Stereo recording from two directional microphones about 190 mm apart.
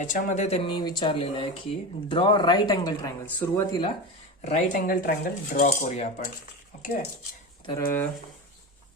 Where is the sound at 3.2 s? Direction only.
10° left (ahead or behind).